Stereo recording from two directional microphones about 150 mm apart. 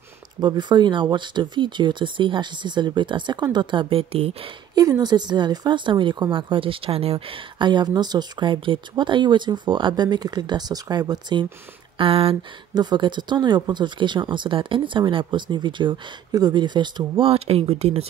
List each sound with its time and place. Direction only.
0.4 s a woman's voice: 30° right (ahead or behind)
4.7 s a woman's voice: 25° right (ahead or behind); by 18.0 s 40° right (ahead or behind)